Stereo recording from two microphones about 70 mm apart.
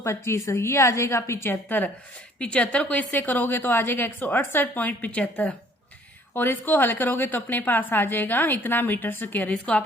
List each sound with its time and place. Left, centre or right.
0.0 s a woman's voice: left
2.4 s a woman's voice: centre